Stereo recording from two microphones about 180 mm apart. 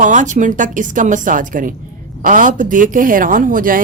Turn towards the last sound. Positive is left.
turn(degrees=-50)  # may be behind; listen again after turning